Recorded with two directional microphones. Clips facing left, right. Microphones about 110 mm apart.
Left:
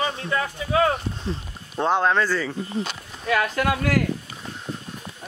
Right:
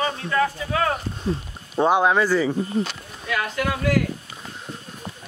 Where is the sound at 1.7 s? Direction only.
10° right (ahead or behind).